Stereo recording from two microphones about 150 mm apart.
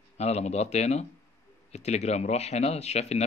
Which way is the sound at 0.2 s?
45° left (ahead or behind).